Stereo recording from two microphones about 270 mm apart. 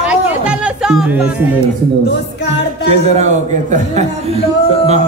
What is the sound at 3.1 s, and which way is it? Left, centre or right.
A man's voice, right.